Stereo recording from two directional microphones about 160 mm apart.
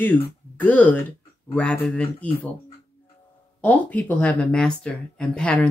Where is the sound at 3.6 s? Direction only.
10° left (ahead or behind).